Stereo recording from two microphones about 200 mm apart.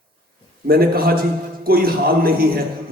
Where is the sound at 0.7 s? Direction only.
50° right (ahead or behind).